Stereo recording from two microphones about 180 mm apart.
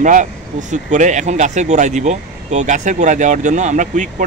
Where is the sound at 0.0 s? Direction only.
45° right (ahead or behind).